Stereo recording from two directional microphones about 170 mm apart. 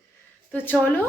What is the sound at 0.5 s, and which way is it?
Speech, 10° left (ahead or behind).